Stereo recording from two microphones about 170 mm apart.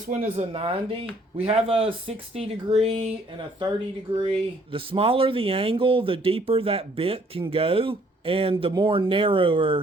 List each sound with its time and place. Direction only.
0.1 s speech: 50° right (ahead or behind)
0.5 s speech: 30° right (ahead or behind)
4.3 s speech: 30° right (ahead or behind)